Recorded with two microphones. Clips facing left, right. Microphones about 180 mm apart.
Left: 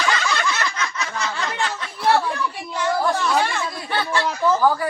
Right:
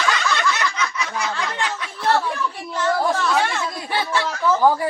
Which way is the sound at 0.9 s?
10° right (ahead or behind).